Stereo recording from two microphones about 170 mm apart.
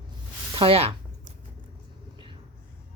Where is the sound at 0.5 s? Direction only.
35° right (ahead or behind).